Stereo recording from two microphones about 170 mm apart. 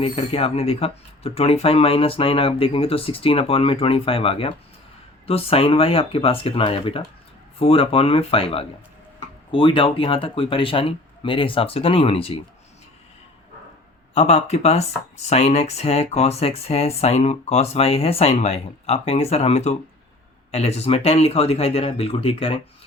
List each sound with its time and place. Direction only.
0.0 s speech: 35° left (ahead or behind)
14.1 s speech: 40° left (ahead or behind)